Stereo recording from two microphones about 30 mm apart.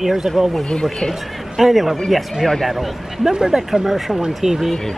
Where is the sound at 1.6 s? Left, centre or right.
Centre.